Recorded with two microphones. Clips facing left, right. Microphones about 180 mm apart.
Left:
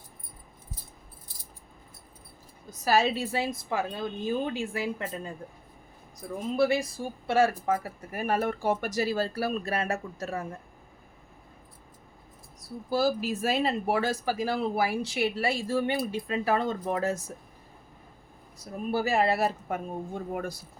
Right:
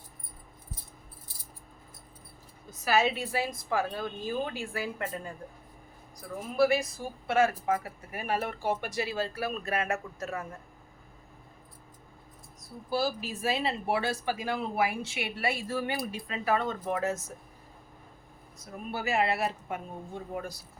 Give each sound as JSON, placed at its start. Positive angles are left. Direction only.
{"t": 2.6, "sound": "a woman's voice", "side_deg": 35}
{"t": 6.6, "sound": "speech", "side_deg": 30}
{"t": 12.9, "sound": "a woman's voice", "side_deg": 45}
{"t": 18.6, "sound": "speech", "side_deg": 35}
{"t": 20.3, "sound": "speech", "side_deg": 55}